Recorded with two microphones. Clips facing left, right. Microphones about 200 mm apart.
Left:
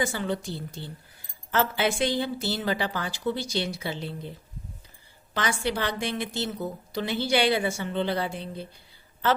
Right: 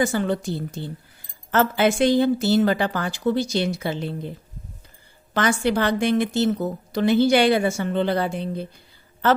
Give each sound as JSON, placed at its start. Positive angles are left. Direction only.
{"t": 0.0, "sound": "a woman's voice", "side_deg": -50}
{"t": 5.3, "sound": "a woman's voice", "side_deg": -50}